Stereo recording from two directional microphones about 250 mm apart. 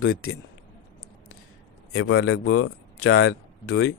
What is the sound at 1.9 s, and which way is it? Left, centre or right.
Speech, left.